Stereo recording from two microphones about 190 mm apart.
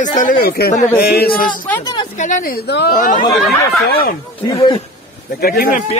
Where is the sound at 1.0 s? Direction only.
55° left (ahead or behind).